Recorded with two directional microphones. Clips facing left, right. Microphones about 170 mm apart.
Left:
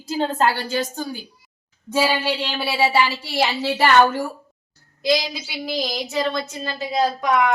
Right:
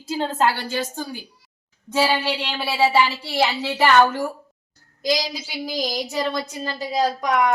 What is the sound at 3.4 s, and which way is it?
Speech, 15° left (ahead or behind).